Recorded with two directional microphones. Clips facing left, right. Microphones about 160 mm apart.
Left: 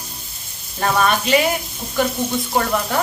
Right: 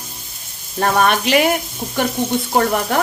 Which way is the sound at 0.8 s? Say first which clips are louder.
Right 2 dB; 60° right (ahead or behind).